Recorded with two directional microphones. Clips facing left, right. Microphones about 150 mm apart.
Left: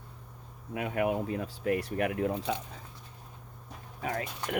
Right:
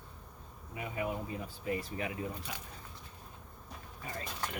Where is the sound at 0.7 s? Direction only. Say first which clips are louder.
Left 8 dB; 80° left.